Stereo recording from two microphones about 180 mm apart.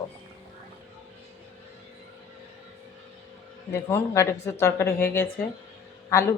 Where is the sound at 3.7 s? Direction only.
15° left (ahead or behind).